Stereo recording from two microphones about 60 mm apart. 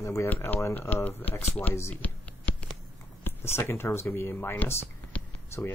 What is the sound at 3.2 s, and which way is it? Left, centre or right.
Speech, left.